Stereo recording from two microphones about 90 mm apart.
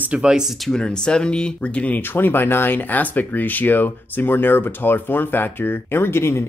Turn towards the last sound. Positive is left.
turn(degrees=25)  # may be behind; listen again after turning